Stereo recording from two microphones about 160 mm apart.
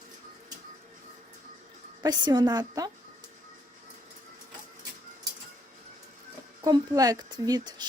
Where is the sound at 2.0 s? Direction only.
25° right (ahead or behind).